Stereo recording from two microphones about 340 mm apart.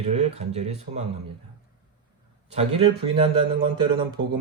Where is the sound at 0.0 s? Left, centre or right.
Centre.